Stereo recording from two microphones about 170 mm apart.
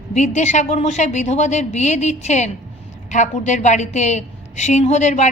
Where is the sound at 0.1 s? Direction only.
45° left (ahead or behind).